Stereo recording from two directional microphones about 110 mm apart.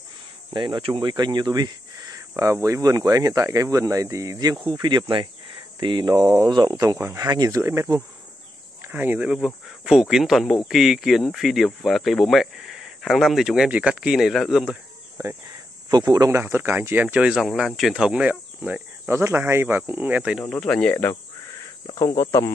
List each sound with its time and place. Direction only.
0.5 s cricket: 45° right (ahead or behind)
2.1 s speech: 30° right (ahead or behind)
4.6 s cricket: 45° right (ahead or behind)
5.8 s speech: 45° right (ahead or behind); by 9.3 s 15° right (ahead or behind)
9.3 s speech: 5° right (ahead or behind)
15.9 s speech: 40° right (ahead or behind)
16.3 s speech: 25° right (ahead or behind)
20.5 s speech: 10° left (ahead or behind)
21.9 s speech: 35° left (ahead or behind)